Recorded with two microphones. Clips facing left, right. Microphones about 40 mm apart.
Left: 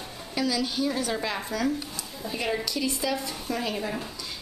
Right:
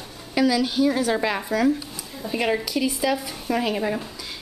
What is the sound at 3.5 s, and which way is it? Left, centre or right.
Speech, right.